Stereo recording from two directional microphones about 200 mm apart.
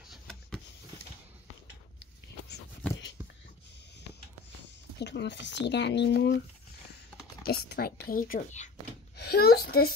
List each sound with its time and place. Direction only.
0.1 s vehicle: 5° left (ahead or behind)
2.0 s a sound: 55° left (ahead or behind)
4.9 s speech: 60° left (ahead or behind)
7.4 s speech: 50° left (ahead or behind)
9.1 s a woman's voice: 55° left (ahead or behind)